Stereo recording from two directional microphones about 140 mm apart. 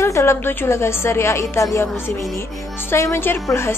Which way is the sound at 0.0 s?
20° left (ahead or behind).